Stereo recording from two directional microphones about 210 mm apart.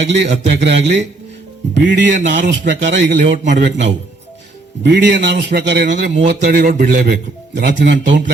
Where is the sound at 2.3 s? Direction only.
50° right (ahead or behind).